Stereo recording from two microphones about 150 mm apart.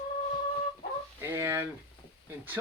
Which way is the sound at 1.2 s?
15° right (ahead or behind).